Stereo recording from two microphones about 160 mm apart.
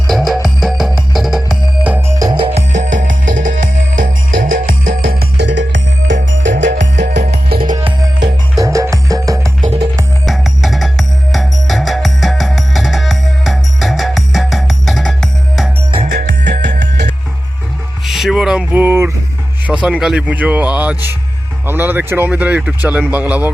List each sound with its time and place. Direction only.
0.1 s music: centre (ahead or behind)
2.1 s music: 25° right (ahead or behind)
2.7 s music: 50° right (ahead or behind); by 7.8 s 65° right (ahead or behind)
7.8 s music: 35° right (ahead or behind)
8.5 s music: 20° right (ahead or behind)
9.6 s music: 40° right (ahead or behind)
10.2 s music: centre (ahead or behind)
16.0 s music: 80° right
18.0 s music: centre (ahead or behind)
19.6 s speech: 5° right (ahead or behind)